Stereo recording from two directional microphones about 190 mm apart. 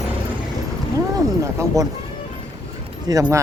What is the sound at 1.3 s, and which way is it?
Speech, 15° right (ahead or behind).